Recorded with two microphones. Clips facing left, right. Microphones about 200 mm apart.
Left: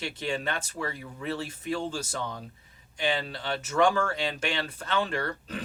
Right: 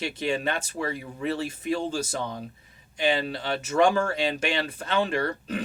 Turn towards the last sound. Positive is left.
turn(degrees=-15)  # may be behind; listen again after turning